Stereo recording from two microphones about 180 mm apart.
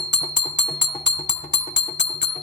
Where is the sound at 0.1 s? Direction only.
80° left.